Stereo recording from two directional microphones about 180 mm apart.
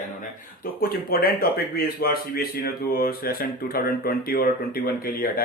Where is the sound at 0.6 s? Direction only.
55° left (ahead or behind).